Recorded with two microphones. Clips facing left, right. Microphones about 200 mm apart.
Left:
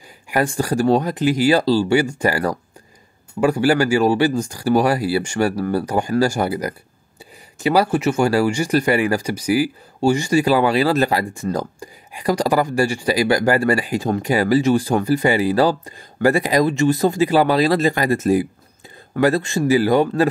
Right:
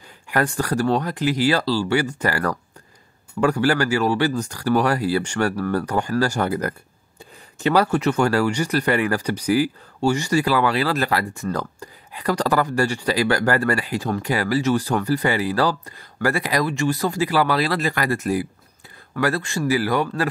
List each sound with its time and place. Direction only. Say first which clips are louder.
0.6 s speech: left 7 dB; 15° left (ahead or behind)